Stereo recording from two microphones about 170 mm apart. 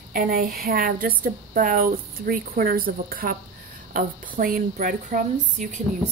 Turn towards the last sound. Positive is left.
turn(degrees=-45)  # may be behind; listen again after turning